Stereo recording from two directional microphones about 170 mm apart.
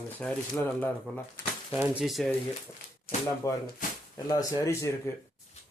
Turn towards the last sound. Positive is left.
turn(degrees=15)  # may be behind; listen again after turning